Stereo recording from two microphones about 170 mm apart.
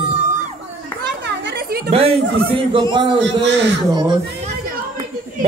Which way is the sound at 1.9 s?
35° right (ahead or behind).